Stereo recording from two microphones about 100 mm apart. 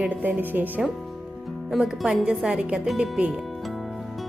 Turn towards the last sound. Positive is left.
turn(degrees=-5)  # may be behind; listen again after turning